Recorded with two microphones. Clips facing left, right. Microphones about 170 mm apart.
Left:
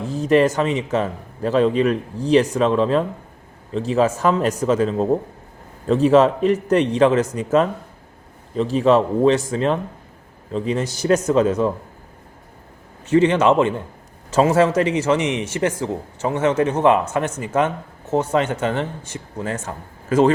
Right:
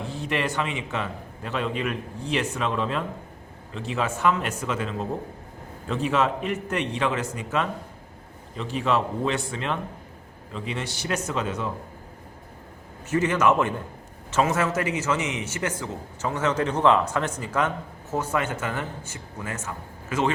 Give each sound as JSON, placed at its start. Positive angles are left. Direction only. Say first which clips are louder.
{"t": 0.0, "sound": "a man's voice", "louder": "left 12 dB", "side_deg": 40}
{"t": 13.1, "sound": "a man's voice", "louder": "left 7 dB", "side_deg": 30}